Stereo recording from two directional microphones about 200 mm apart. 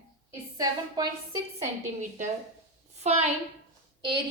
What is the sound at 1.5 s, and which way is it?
A woman's voice, 35° right (ahead or behind).